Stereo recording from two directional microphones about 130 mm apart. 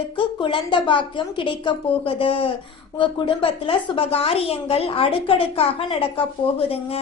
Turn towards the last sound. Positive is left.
turn(degrees=45)  # may be behind; listen again after turning